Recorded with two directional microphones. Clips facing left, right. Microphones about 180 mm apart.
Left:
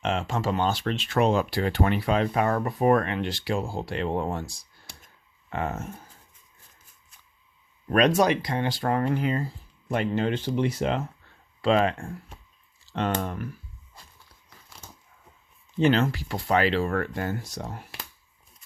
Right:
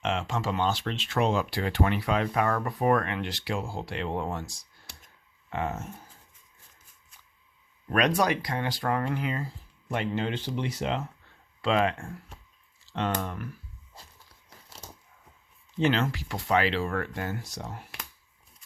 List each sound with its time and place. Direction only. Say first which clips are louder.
0.0 s speech: left 3 dB; 40° left (ahead or behind)
5.5 s speech: left 1 dB; 50° left (ahead or behind)
7.9 s speech: left 4 dB; 25° left (ahead or behind); by 11.0 s 50° left (ahead or behind)
11.6 s speech: left 3 dB; 40° left (ahead or behind)
15.8 s speech: left 4 dB; 40° left (ahead or behind)